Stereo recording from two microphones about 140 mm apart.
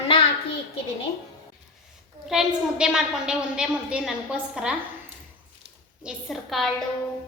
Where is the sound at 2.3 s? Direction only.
5° right (ahead or behind).